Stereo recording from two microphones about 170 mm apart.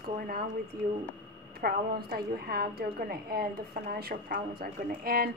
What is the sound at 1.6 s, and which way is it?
Speech, 65° right (ahead or behind).